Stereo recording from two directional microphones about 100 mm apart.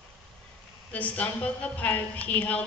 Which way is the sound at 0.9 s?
15° left (ahead or behind).